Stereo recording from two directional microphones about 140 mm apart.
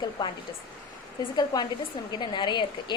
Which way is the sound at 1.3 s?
30° left (ahead or behind).